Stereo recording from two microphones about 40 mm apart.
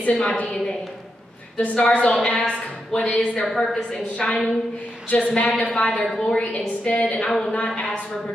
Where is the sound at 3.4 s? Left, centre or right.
Centre.